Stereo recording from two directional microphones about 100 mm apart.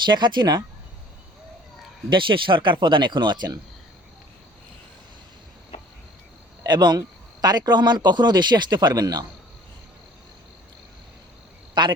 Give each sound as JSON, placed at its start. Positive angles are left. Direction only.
{"t": 0.0, "sound": "a man's voice", "side_deg": -50}
{"t": 2.0, "sound": "a man's voice", "side_deg": -55}
{"t": 6.6, "sound": "a man's voice", "side_deg": -45}
{"t": 11.7, "sound": "cricket", "side_deg": -50}